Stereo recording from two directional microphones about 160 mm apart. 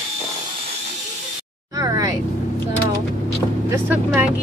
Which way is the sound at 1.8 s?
25° right (ahead or behind).